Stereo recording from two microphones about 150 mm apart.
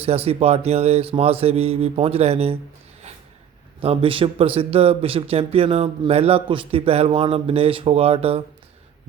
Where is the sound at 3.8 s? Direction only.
40° right (ahead or behind).